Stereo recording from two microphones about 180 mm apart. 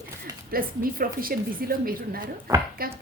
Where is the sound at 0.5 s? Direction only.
55° right (ahead or behind).